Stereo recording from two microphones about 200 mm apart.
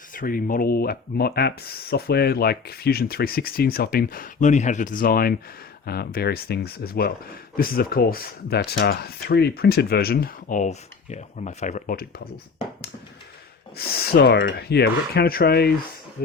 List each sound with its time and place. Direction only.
0.1 s speech: 45° left (ahead or behind)
13.7 s speech: 50° left (ahead or behind)